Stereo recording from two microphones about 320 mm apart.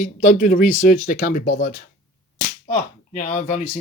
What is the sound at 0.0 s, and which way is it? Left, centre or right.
Speech, left.